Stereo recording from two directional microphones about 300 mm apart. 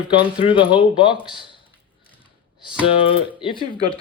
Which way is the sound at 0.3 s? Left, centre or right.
Centre.